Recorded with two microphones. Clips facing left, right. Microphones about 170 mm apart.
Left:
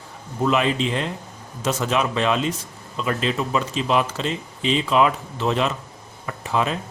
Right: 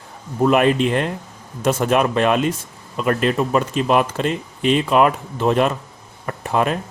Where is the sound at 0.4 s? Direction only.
55° right (ahead or behind).